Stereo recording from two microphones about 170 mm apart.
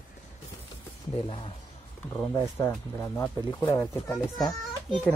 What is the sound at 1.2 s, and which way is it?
Speech, 35° left (ahead or behind).